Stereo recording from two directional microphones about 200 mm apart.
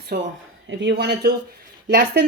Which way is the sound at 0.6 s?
60° right (ahead or behind).